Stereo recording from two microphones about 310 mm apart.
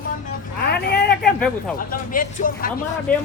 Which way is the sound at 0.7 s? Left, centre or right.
Left.